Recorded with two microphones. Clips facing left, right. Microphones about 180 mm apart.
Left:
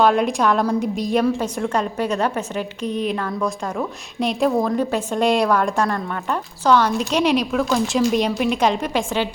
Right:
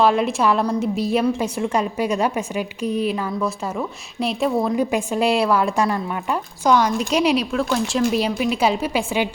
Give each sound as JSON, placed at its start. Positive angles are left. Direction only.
{"t": 0.0, "sound": "a woman's voice", "side_deg": 0}